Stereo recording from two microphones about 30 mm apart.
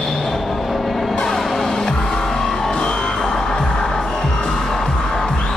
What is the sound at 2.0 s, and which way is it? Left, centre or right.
Music, centre.